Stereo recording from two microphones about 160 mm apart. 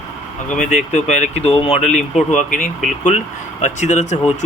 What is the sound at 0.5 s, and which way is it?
Speech, 50° left (ahead or behind).